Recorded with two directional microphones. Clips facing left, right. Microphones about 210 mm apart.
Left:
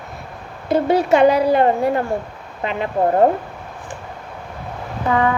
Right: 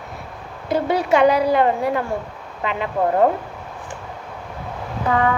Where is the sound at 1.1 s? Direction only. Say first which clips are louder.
Left 1 dB; 45° left (ahead or behind).